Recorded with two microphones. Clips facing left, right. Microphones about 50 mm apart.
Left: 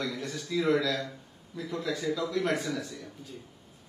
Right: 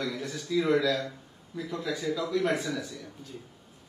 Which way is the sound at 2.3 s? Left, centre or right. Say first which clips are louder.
Right 4 dB; centre.